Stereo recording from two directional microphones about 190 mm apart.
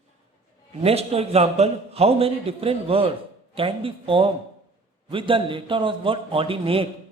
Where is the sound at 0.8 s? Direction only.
30° right (ahead or behind).